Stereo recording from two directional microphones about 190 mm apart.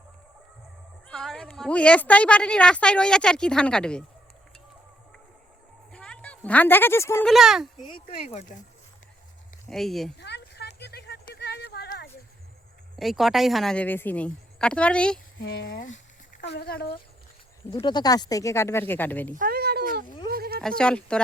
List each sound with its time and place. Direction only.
1.0 s a woman's voice: 5° left (ahead or behind)
5.9 s a sound: 5° left (ahead or behind)
7.3 s a woman's voice: centre (ahead or behind)
8.3 s speech: 40° left (ahead or behind)
9.6 s speech: centre (ahead or behind)
10.2 s a sound: 60° left (ahead or behind)
13.0 s a woman's voice: centre (ahead or behind)
15.4 s a woman's voice: 75° left (ahead or behind); by 16.9 s 55° left (ahead or behind)
17.7 s speech: 25° left (ahead or behind)
19.3 s speech: 50° right (ahead or behind)
20.2 s a sound: 55° right (ahead or behind)
20.6 s a woman's voice: 5° left (ahead or behind)